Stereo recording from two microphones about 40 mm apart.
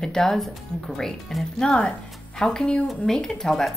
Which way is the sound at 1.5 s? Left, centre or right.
Centre.